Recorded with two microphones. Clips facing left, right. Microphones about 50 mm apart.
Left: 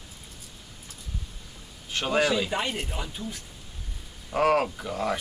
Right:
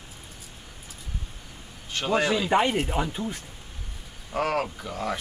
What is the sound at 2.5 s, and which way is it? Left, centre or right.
Speech, right.